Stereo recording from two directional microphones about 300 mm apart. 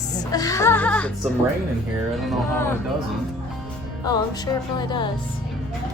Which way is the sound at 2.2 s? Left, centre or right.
Centre.